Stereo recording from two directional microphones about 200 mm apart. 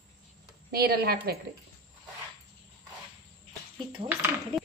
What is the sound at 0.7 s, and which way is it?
Speech, 50° right (ahead or behind).